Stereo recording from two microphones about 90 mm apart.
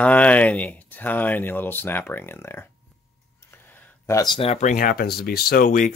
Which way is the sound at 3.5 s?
20° left (ahead or behind).